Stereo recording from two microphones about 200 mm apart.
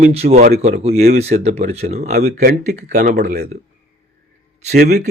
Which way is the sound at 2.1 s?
50° right (ahead or behind).